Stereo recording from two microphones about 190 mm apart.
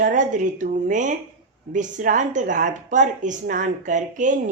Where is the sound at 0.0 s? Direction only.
40° right (ahead or behind).